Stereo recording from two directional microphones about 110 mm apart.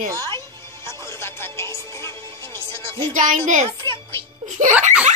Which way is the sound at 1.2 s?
25° left (ahead or behind).